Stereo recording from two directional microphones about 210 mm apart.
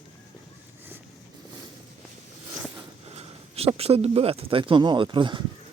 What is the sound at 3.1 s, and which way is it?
Speech, 30° right (ahead or behind).